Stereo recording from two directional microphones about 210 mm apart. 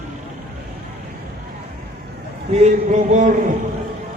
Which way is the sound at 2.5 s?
35° right (ahead or behind).